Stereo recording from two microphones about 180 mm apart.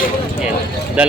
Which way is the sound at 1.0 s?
5° right (ahead or behind).